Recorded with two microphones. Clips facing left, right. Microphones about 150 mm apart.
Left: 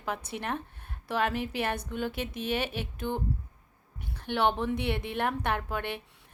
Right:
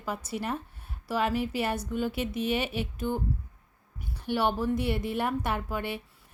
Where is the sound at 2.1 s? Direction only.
50° left (ahead or behind).